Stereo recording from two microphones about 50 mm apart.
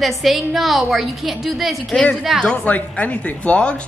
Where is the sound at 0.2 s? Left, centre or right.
Centre.